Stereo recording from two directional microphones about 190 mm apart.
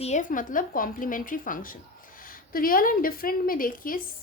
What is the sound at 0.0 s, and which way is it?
A woman's voice, 40° left (ahead or behind).